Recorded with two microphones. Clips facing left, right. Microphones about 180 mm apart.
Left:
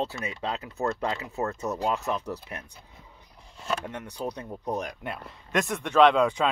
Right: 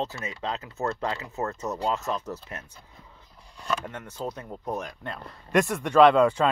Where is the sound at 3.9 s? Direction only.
15° left (ahead or behind).